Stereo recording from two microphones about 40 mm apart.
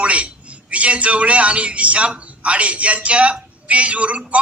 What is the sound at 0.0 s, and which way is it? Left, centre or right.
A man's voice, right.